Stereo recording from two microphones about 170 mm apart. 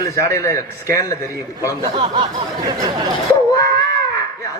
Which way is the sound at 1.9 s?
30° right (ahead or behind).